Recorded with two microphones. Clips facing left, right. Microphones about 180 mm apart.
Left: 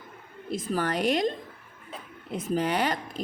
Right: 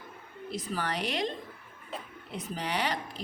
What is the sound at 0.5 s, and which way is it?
Speech, 50° left (ahead or behind).